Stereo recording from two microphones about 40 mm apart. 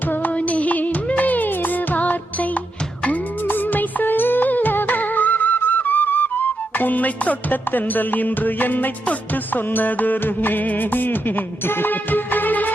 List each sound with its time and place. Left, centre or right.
0.3 s music: left